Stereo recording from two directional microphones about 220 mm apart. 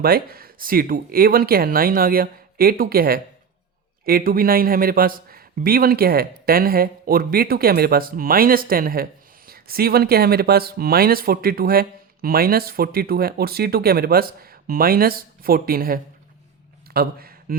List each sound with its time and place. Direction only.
0.0 s speech: 45° right (ahead or behind)